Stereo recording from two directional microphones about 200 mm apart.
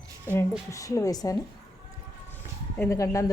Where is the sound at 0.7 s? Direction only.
15° left (ahead or behind).